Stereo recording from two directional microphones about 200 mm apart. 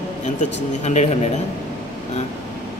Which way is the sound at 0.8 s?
35° left (ahead or behind).